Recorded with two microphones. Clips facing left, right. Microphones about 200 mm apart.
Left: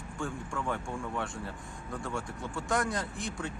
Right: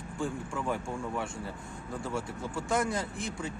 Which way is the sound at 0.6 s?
15° right (ahead or behind).